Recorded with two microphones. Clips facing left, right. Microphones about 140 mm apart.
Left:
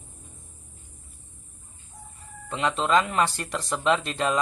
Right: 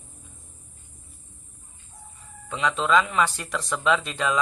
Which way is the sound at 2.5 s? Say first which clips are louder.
Right 1 dB; centre (ahead or behind).